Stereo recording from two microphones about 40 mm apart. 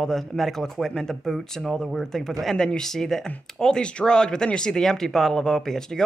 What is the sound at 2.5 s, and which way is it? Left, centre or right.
Speech, centre.